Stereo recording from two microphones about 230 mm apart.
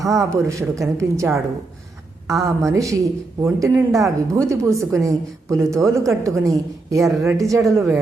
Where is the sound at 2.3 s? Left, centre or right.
Centre.